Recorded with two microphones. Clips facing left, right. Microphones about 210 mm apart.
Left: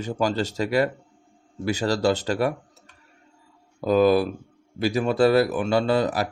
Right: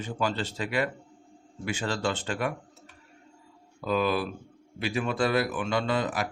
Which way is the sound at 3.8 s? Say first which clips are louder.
Left 8 dB; 40° left (ahead or behind).